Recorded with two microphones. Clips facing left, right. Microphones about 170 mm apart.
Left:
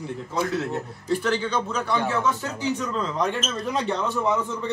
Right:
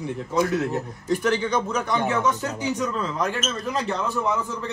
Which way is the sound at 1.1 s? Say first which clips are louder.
Right 2 dB; 15° right (ahead or behind).